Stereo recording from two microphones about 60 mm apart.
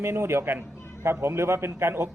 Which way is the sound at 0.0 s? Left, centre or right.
Right.